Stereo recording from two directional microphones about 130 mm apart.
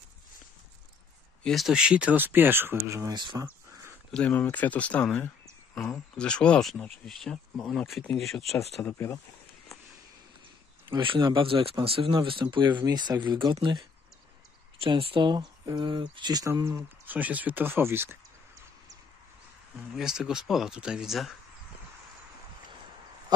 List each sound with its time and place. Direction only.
1.4 s speech: centre (ahead or behind); by 3.2 s 25° right (ahead or behind)
3.2 s speech: 35° right (ahead or behind)
4.1 s speech: 10° left (ahead or behind)
8.8 s speech: 20° left (ahead or behind)
10.9 s speech: 40° right (ahead or behind)
17.0 s speech: 15° right (ahead or behind)
20.0 s speech: 5° right (ahead or behind)